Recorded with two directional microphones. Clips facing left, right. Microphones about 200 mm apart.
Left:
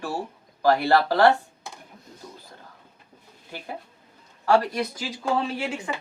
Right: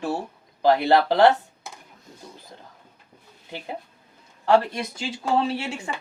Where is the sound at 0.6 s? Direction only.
20° right (ahead or behind).